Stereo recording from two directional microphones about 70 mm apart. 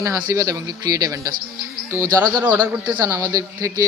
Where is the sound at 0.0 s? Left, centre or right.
Right.